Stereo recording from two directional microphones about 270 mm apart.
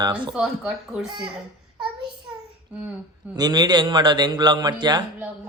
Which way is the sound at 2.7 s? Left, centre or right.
Centre.